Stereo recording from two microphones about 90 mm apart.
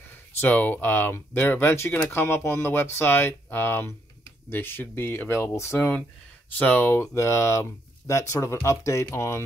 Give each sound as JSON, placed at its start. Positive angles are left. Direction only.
{"t": 0.1, "sound": "speech", "side_deg": 20}